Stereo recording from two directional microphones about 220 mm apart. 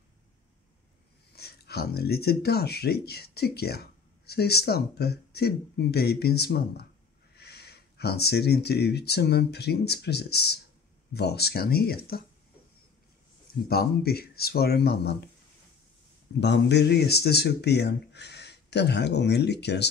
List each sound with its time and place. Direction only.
1.3 s speech: 45° left (ahead or behind)
13.7 s speech: 45° left (ahead or behind)
16.3 s speech: 50° left (ahead or behind)